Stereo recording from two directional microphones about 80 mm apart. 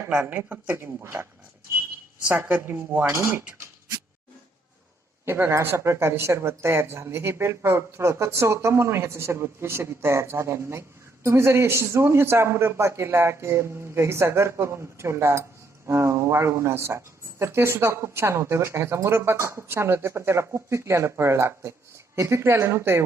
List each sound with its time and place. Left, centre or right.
0.3 s speech: centre
0.8 s speech: right
5.2 s speech: right